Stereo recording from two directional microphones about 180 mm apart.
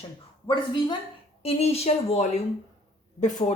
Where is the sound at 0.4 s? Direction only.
25° left (ahead or behind).